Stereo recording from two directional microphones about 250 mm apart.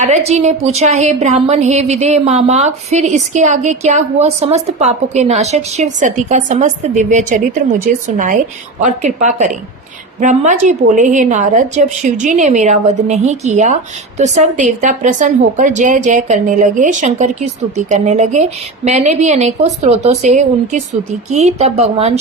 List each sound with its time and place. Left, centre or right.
0.0 s a woman's voice: right